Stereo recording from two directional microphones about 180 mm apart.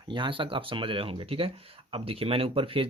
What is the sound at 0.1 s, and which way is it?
Speech, 25° right (ahead or behind).